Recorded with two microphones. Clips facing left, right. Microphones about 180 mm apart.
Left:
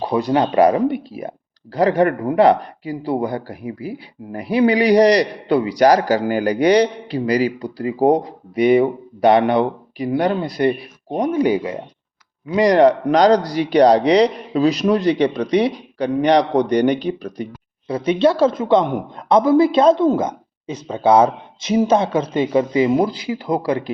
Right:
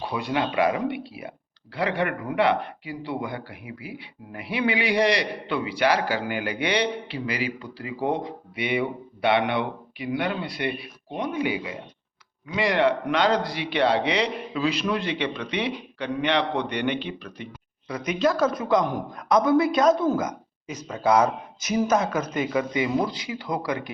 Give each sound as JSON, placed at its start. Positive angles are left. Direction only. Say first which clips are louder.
{"t": 0.0, "sound": "speech", "louder": "left 9 dB", "side_deg": 40}